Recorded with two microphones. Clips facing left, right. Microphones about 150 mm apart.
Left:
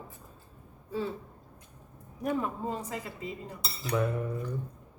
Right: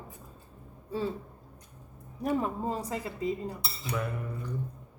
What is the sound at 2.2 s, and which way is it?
Speech, 35° right (ahead or behind).